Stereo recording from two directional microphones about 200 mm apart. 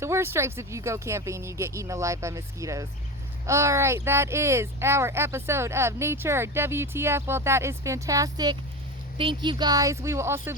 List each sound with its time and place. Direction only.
0.0 s speech: 15° right (ahead or behind)